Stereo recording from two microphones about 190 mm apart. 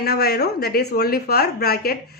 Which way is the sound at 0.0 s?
55° left (ahead or behind).